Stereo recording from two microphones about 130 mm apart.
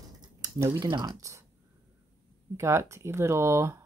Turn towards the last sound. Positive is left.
turn(degrees=-20)  # may be behind; listen again after turning